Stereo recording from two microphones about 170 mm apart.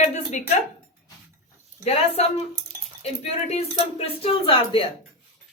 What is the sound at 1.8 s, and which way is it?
Speech, 35° left (ahead or behind).